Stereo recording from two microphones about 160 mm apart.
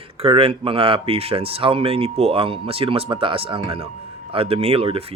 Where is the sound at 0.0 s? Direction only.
35° right (ahead or behind).